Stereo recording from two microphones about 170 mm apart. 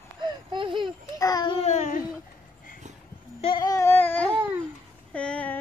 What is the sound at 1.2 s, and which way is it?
Babbling, 25° left (ahead or behind).